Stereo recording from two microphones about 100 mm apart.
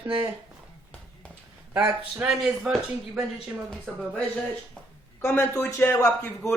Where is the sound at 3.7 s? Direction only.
5° left (ahead or behind).